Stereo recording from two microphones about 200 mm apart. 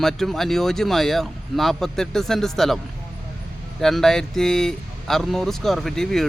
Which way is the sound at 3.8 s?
Centre (ahead or behind).